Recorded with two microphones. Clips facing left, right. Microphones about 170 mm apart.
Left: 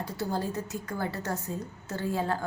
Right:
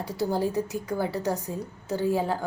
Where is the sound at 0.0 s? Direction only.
15° right (ahead or behind).